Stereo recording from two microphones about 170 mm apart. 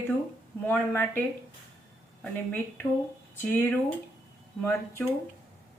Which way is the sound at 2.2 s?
10° left (ahead or behind).